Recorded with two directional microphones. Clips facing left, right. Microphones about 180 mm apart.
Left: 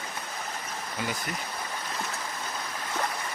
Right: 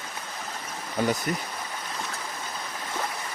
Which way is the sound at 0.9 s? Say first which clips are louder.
Right 9 dB; 40° right (ahead or behind).